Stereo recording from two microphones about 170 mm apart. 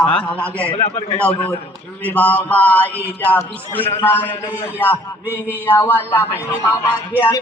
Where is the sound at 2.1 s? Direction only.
10° left (ahead or behind).